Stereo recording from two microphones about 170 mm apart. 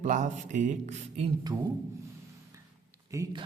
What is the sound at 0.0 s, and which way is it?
Speech, 45° right (ahead or behind).